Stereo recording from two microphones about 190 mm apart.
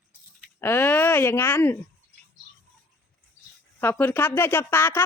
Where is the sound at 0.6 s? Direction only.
10° left (ahead or behind).